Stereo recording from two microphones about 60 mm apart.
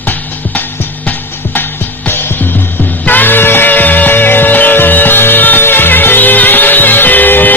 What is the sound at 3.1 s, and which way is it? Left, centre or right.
Music, left.